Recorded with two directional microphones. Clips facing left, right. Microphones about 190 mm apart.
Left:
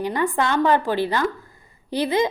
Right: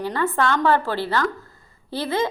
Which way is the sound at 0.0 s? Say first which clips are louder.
Even; 15° left (ahead or behind).